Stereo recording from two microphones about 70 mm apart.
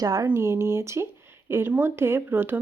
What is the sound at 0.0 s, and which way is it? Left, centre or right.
Speech, right.